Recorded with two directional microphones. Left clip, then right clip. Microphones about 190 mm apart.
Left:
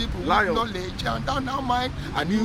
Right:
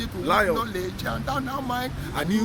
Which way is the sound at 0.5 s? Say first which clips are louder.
Left 1 dB; 15° left (ahead or behind).